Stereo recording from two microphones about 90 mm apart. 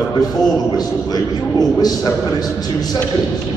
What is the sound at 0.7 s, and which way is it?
A man's voice, 45° left (ahead or behind).